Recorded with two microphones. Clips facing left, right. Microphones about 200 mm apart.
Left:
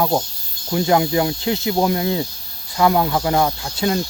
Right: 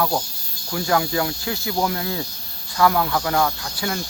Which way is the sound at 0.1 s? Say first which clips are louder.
Left 5 dB; 20° left (ahead or behind).